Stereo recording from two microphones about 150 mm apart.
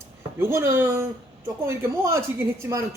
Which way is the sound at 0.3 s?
15° right (ahead or behind).